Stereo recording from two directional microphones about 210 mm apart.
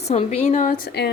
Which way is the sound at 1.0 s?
50° left (ahead or behind).